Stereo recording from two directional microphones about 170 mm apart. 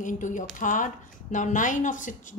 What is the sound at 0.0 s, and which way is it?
Speech, 50° left (ahead or behind).